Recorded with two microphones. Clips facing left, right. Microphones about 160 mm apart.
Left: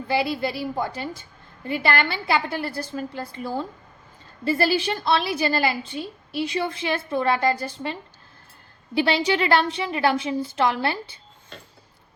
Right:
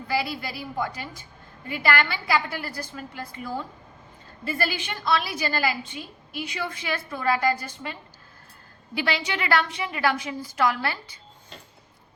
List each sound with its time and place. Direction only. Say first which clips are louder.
0.1 s a woman's voice: left 5 dB; 25° left (ahead or behind)
9.0 s a woman's voice: left 7 dB; 30° left (ahead or behind)